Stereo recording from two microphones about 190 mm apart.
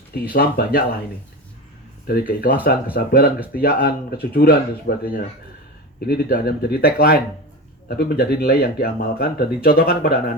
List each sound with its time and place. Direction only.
0.1 s speech: 55° left (ahead or behind)
2.0 s speech: 45° left (ahead or behind)